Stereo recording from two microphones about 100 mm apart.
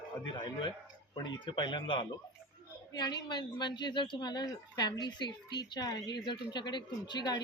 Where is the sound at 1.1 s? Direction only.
45° left (ahead or behind).